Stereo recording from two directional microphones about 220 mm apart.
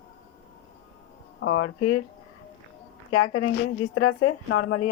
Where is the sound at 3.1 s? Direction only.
75° left (ahead or behind).